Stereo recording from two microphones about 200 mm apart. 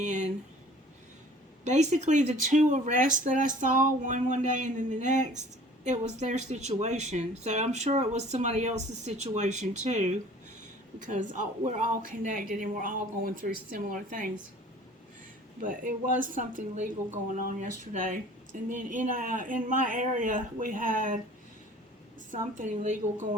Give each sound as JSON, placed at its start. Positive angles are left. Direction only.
{"t": 0.0, "sound": "speech", "side_deg": -35}
{"t": 1.6, "sound": "speech", "side_deg": -35}
{"t": 16.2, "sound": "a man's voice", "side_deg": -40}
{"t": 22.3, "sound": "speech", "side_deg": -40}